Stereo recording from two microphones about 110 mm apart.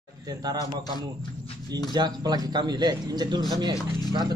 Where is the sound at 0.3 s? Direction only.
35° right (ahead or behind).